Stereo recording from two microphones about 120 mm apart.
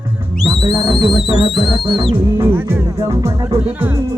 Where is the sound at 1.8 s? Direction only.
40° right (ahead or behind).